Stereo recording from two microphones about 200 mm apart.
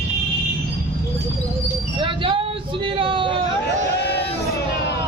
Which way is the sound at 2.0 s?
25° right (ahead or behind).